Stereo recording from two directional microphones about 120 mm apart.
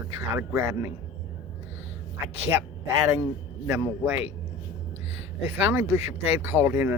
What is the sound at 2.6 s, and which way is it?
Speech, 25° right (ahead or behind).